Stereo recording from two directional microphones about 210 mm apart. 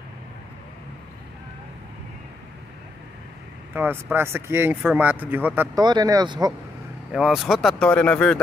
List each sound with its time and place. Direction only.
3.7 s speech: 10° right (ahead or behind)
7.1 s speech: centre (ahead or behind)